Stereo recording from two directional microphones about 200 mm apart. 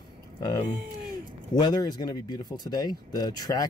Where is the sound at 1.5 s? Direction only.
20° left (ahead or behind).